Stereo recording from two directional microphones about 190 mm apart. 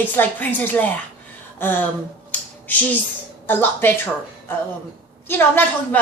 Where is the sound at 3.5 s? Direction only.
10° left (ahead or behind).